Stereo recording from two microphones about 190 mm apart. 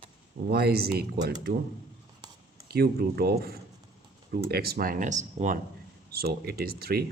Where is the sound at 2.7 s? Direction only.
55° right (ahead or behind).